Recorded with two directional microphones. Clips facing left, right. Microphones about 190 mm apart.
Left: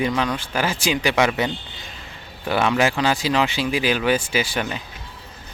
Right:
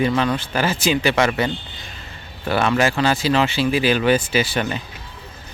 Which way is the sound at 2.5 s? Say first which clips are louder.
Right 1 dB; 15° left (ahead or behind).